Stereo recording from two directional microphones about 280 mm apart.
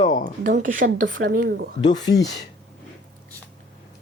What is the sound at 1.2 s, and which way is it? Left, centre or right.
Speech, right.